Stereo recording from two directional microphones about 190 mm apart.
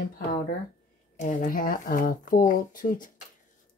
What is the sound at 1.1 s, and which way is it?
Speech, 40° left (ahead or behind).